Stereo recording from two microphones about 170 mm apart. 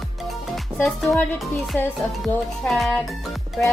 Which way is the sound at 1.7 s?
10° left (ahead or behind).